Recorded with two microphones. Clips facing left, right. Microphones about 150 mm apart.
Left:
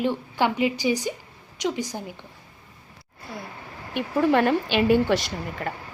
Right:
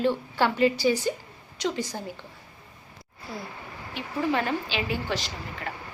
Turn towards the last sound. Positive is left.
turn(degrees=40)  # may be behind; listen again after turning